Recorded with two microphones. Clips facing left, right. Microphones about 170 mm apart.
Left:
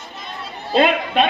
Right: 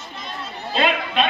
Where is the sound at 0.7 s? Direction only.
50° left (ahead or behind).